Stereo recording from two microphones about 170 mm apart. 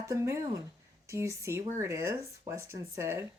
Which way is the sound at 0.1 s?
15° right (ahead or behind).